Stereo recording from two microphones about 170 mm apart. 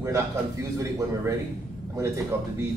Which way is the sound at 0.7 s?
20° right (ahead or behind).